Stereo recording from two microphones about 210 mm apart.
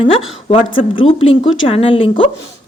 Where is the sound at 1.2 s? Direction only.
65° left (ahead or behind).